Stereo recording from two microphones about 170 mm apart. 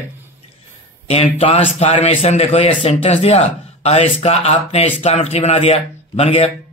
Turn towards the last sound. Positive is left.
turn(degrees=35)  # may be behind; listen again after turning